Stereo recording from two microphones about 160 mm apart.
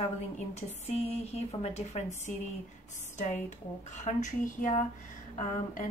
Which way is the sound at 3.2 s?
50° left (ahead or behind).